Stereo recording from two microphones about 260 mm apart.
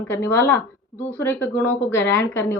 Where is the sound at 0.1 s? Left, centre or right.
Centre.